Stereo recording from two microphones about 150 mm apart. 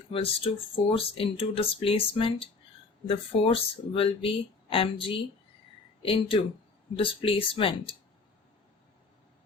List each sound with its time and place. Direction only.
0.1 s speech: 35° left (ahead or behind)